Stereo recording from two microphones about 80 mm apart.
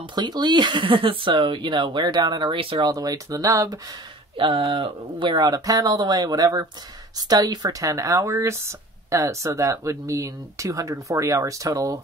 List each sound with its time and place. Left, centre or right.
0.0 s speech: right
2.9 s speech: right
4.4 s speech: right